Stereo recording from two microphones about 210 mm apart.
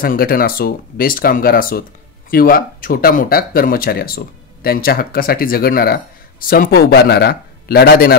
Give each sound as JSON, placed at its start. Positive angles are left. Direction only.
{"t": 0.0, "sound": "speech", "side_deg": 45}